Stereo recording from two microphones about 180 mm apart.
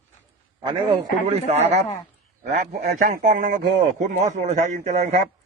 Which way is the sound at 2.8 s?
55° right (ahead or behind).